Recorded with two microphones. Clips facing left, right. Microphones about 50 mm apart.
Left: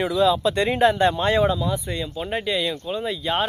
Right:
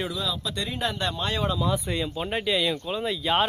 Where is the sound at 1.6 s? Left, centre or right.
Centre.